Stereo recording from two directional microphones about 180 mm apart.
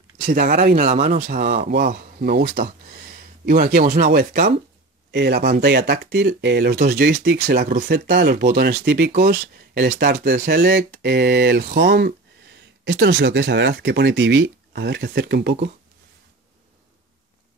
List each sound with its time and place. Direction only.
0.2 s speech: 55° right (ahead or behind)
1.6 s speech: 65° right (ahead or behind)
2.0 s speech: 55° right (ahead or behind)
12.8 s speech: 80° right